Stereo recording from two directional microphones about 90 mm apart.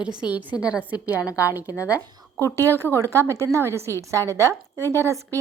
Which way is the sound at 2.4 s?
35° right (ahead or behind).